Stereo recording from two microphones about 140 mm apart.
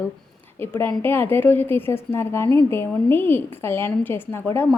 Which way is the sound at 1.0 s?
15° left (ahead or behind).